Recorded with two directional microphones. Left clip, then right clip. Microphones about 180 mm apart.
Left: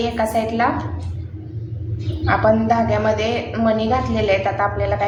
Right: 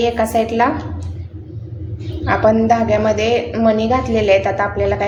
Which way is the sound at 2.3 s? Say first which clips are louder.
Right 3 dB; 40° right (ahead or behind).